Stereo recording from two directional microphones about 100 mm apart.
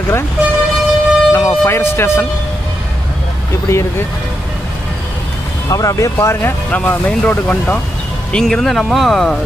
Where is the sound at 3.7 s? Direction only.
30° left (ahead or behind).